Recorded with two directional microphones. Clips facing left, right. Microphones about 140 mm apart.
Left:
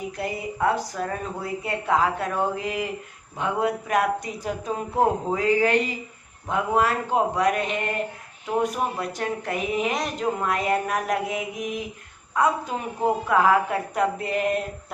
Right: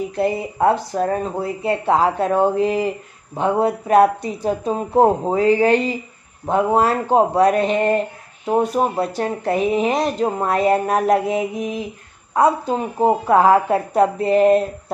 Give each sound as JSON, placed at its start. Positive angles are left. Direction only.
{"t": 0.2, "sound": "speech", "side_deg": -30}